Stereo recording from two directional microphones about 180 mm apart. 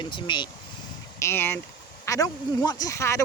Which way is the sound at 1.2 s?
10° left (ahead or behind).